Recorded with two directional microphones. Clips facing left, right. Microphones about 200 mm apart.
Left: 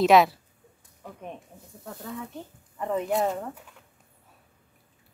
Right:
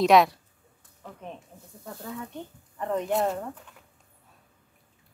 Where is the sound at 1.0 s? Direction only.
10° left (ahead or behind).